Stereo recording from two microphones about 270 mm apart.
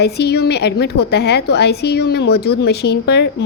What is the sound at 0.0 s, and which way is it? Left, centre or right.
A woman's voice, left.